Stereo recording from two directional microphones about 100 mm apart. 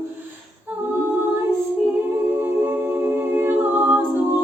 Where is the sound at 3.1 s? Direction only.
20° right (ahead or behind).